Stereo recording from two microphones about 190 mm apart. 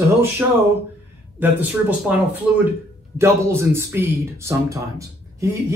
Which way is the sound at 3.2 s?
15° right (ahead or behind).